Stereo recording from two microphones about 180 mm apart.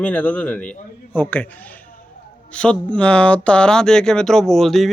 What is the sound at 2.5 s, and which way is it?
Speech, 5° left (ahead or behind).